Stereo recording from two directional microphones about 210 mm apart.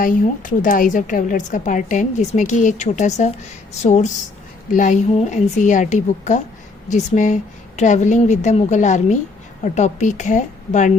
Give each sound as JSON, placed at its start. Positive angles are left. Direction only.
{"t": 0.0, "sound": "a woman's voice", "side_deg": 40}